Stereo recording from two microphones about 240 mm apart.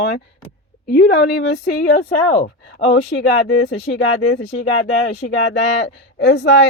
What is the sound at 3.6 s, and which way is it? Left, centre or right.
Speech, left.